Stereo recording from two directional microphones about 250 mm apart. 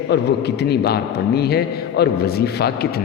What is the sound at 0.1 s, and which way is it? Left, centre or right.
A man's voice, left.